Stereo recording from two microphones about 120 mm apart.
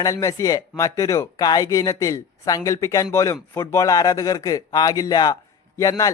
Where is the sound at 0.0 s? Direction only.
25° left (ahead or behind).